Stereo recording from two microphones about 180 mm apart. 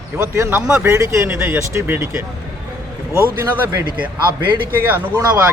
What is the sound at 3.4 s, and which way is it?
Speech, 20° right (ahead or behind).